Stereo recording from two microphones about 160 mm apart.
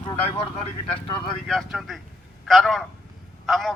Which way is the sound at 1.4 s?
Centre (ahead or behind).